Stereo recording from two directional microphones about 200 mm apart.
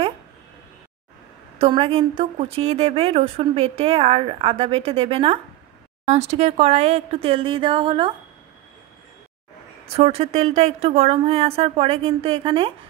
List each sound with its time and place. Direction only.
1.6 s a woman's voice: 30° right (ahead or behind)
9.9 s speech: 30° right (ahead or behind)